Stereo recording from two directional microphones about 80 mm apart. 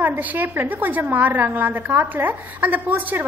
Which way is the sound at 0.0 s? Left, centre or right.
Right.